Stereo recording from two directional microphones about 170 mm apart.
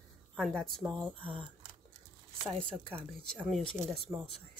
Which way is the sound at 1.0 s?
30° right (ahead or behind).